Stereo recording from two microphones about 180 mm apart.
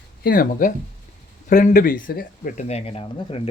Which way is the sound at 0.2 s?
55° left (ahead or behind).